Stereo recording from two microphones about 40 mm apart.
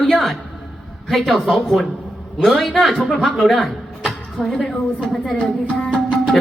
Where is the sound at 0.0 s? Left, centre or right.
Centre.